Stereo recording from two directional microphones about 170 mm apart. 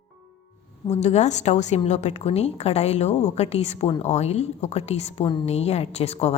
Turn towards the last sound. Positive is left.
turn(degrees=40)  # may be behind; listen again after turning